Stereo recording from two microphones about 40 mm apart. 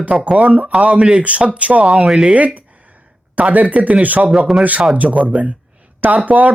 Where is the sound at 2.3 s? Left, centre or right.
Right.